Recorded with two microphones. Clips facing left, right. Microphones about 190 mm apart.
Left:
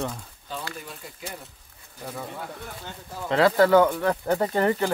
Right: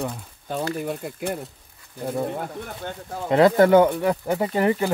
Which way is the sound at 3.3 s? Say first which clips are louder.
Right 3 dB; 20° right (ahead or behind).